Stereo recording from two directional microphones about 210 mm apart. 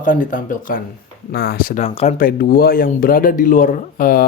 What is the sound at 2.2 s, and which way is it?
Speech, 45° left (ahead or behind).